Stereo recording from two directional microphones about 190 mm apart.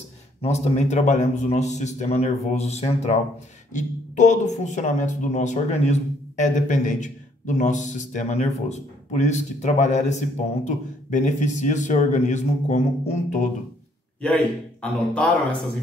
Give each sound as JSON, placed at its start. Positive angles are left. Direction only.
{"t": 0.4, "sound": "speech", "side_deg": 35}
{"t": 14.2, "sound": "a man's voice", "side_deg": 5}